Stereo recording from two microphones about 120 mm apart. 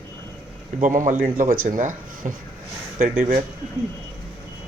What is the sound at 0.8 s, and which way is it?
Speech, 90° right.